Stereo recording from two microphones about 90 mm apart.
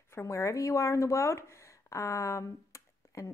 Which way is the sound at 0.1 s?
35° left (ahead or behind).